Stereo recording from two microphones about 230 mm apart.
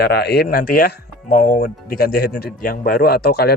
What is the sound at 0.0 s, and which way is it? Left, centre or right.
Speech, left.